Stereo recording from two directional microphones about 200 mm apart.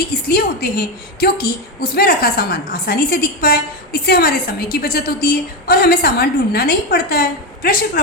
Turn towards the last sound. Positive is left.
turn(degrees=45)  # may be behind; listen again after turning